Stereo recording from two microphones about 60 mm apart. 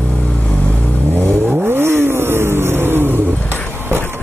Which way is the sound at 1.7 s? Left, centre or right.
Right.